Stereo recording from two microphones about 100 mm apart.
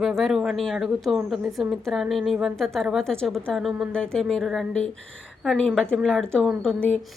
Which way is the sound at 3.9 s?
10° left (ahead or behind).